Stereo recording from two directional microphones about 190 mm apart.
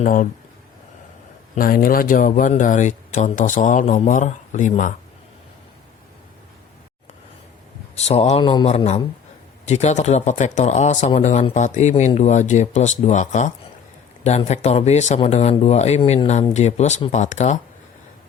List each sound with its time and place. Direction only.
0.0 s speech: 45° left (ahead or behind)
1.5 s speech: 50° left (ahead or behind)
7.9 s speech: 35° left (ahead or behind)